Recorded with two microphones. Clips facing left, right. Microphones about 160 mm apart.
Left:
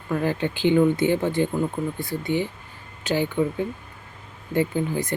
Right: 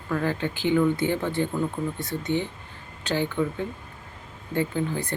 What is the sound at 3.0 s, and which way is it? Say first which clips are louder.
Speech: left 3 dB; 10° left (ahead or behind).